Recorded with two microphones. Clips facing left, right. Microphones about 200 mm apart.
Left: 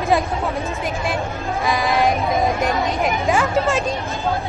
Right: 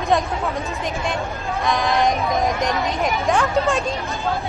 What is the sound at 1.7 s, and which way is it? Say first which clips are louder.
Speech: left 1 dB; centre (ahead or behind).